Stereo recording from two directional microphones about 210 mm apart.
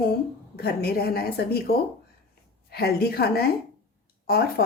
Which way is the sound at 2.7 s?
45° left (ahead or behind).